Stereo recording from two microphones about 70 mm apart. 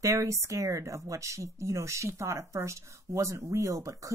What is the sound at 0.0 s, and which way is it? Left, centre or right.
Speech, right.